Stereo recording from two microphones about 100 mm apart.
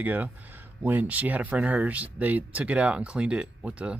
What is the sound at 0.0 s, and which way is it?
Speech, 15° right (ahead or behind).